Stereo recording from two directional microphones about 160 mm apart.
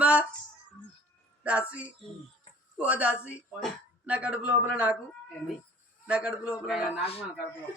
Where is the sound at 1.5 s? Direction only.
10° right (ahead or behind).